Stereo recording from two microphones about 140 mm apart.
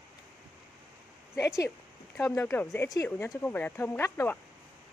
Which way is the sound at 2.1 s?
15° left (ahead or behind).